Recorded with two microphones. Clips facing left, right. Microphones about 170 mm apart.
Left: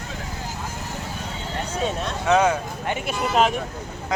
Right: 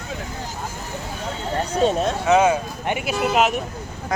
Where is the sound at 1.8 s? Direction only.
40° right (ahead or behind).